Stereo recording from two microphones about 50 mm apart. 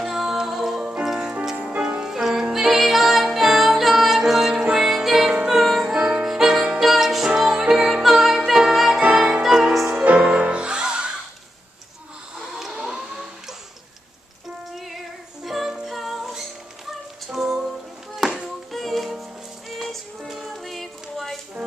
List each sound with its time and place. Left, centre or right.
0.0 s music: centre
5.9 s music: right
6.2 s music: centre
9.1 s music: centre
10.0 s music: right
12.4 s a sound: centre
15.4 s music: centre
18.2 s music: centre